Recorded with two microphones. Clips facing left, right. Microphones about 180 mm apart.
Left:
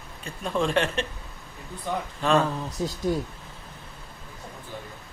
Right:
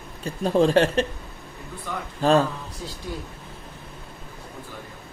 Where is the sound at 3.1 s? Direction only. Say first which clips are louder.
Left 8 dB; 45° left (ahead or behind).